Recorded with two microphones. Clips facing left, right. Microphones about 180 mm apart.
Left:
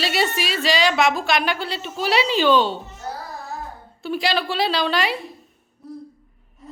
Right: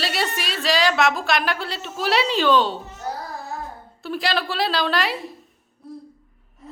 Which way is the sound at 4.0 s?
Centre (ahead or behind).